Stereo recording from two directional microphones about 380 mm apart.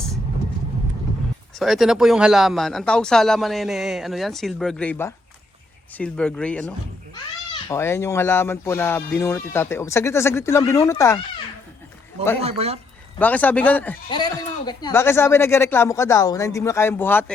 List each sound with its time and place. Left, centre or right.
1.5 s a man's voice: centre
12.4 s speech: centre
13.1 s a man's voice: centre